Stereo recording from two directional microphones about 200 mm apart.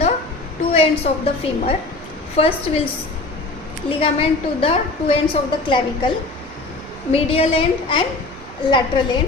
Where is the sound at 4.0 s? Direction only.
30° left (ahead or behind).